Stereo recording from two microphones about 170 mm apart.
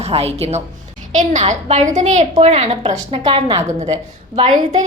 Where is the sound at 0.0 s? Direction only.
35° right (ahead or behind).